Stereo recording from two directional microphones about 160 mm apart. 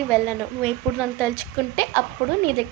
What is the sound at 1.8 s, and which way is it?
Speech, 15° left (ahead or behind).